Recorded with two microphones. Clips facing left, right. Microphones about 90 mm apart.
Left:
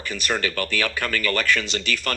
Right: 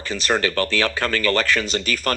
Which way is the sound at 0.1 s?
35° right (ahead or behind).